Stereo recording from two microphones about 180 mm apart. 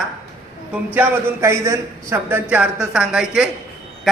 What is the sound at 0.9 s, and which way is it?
A man's voice, 15° right (ahead or behind).